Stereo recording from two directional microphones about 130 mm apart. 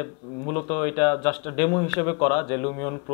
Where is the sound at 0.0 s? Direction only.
20° left (ahead or behind).